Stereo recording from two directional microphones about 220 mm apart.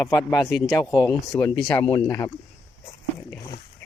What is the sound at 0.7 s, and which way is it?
A man's voice, 15° left (ahead or behind).